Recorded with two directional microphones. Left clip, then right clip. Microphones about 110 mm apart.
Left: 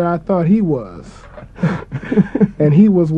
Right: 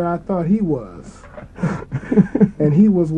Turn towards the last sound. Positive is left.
turn(degrees=-15)  # may be behind; listen again after turning